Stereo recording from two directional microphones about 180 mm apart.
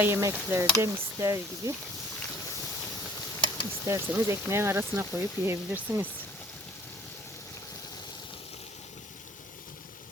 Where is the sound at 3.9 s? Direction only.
15° right (ahead or behind).